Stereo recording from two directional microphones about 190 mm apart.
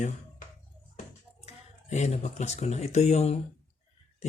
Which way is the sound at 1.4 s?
35° left (ahead or behind).